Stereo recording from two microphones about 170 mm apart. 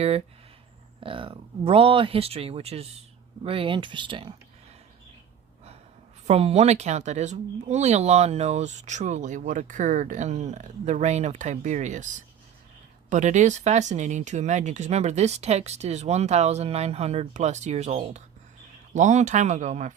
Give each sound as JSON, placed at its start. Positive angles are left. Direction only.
{"t": 1.0, "sound": "speech", "side_deg": -30}
{"t": 6.2, "sound": "speech", "side_deg": -35}
{"t": 13.1, "sound": "speech", "side_deg": -45}